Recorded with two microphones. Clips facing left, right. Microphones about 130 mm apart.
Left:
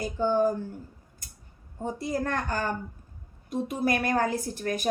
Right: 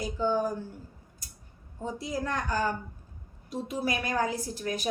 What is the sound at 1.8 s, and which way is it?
A woman's voice, 50° left (ahead or behind).